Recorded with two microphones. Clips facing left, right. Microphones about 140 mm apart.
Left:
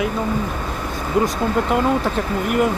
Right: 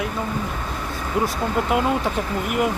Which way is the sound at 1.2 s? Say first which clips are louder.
Left 3 dB; 5° right (ahead or behind).